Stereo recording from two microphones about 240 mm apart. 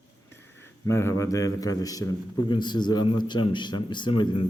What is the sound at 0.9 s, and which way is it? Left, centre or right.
A man's voice, centre.